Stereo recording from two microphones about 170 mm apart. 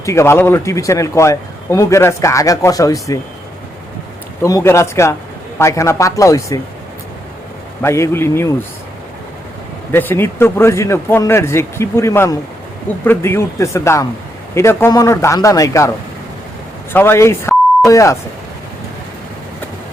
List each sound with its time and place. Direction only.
0.0 s a man's voice: 15° left (ahead or behind)
4.4 s a man's voice: 20° left (ahead or behind)
7.8 s a man's voice: 15° left (ahead or behind)
9.9 s a man's voice: 10° left (ahead or behind)
16.9 s speech: 15° left (ahead or behind)